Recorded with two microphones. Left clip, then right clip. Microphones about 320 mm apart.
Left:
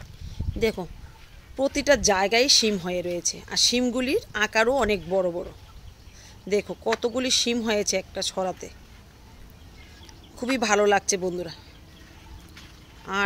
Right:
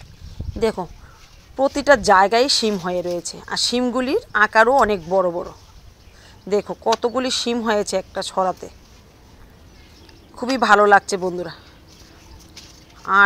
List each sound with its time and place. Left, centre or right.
0.6 s speech: centre
6.5 s speech: centre
10.3 s speech: centre